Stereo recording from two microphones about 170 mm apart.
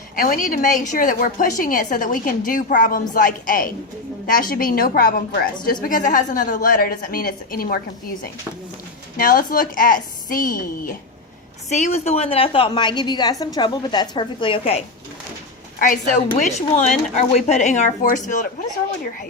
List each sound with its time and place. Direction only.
0.2 s a woman's voice: 50° left (ahead or behind)
5.8 s a woman's voice: 50° left (ahead or behind)
9.1 s a woman's voice: 55° left (ahead or behind)
11.7 s a woman's voice: 40° left (ahead or behind)
15.8 s a woman's voice: 55° left (ahead or behind)
16.4 s a woman's voice: 40° left (ahead or behind)